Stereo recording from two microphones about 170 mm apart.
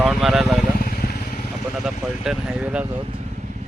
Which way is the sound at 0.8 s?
60° left (ahead or behind).